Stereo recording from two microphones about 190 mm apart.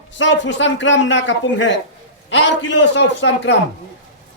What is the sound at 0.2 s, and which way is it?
A man's voice, 75° left (ahead or behind).